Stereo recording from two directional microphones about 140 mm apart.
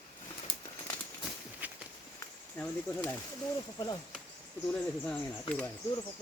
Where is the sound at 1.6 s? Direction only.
10° right (ahead or behind).